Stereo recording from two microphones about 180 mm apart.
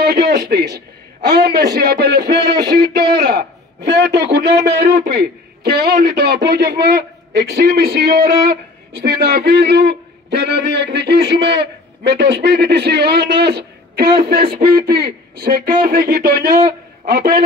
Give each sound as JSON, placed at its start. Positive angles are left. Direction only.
{"t": 0.0, "sound": "a man's voice", "side_deg": -65}